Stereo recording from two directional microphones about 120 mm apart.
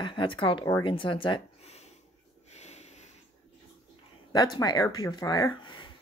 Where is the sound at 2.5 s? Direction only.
65° left (ahead or behind).